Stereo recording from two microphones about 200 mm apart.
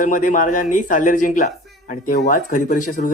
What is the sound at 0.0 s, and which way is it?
Speech, 40° left (ahead or behind).